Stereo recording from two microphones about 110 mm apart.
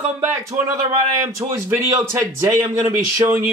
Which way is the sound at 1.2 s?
25° right (ahead or behind).